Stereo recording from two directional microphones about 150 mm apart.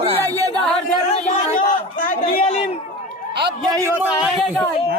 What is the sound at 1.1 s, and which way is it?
A man's voice, 55° left (ahead or behind).